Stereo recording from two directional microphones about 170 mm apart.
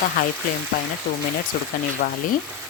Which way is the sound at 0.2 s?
55° left (ahead or behind).